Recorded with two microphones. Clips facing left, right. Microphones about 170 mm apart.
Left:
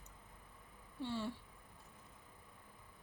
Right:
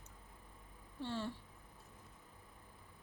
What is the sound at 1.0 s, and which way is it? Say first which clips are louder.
Speech: even; 10° left (ahead or behind).